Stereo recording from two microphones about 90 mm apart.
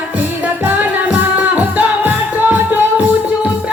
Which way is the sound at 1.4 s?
20° right (ahead or behind).